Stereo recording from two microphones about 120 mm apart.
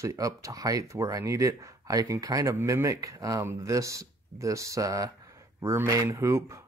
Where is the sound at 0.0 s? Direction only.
25° right (ahead or behind).